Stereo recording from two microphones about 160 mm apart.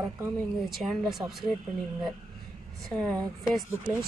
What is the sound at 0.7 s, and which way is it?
Speech, centre (ahead or behind).